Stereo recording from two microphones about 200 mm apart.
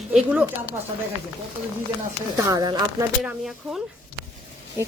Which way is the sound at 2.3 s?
20° right (ahead or behind).